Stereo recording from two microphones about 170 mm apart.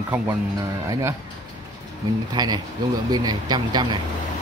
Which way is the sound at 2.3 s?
25° right (ahead or behind).